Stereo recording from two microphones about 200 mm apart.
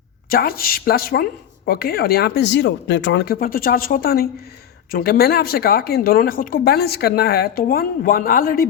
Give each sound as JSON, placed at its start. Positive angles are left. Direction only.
{"t": 0.3, "sound": "speech", "side_deg": 50}